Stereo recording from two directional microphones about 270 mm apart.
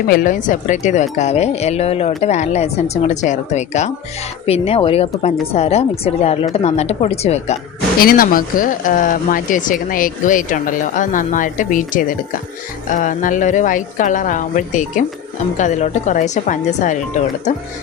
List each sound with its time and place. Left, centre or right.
0.1 s speech: left